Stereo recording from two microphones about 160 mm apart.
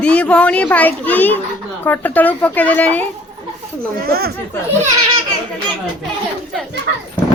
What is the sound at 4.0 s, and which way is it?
Speech, 70° right (ahead or behind).